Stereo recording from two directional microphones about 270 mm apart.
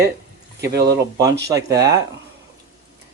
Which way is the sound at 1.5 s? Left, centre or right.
Centre.